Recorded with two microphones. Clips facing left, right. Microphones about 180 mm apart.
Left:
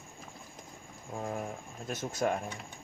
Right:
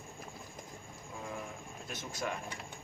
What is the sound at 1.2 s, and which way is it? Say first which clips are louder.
Speech: left 6 dB; 45° left (ahead or behind).